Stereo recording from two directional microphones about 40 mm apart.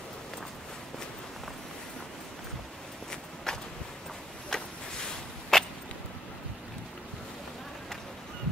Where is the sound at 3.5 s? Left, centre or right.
Centre.